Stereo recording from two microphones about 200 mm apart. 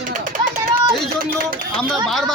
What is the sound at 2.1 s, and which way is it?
Speech, centre (ahead or behind).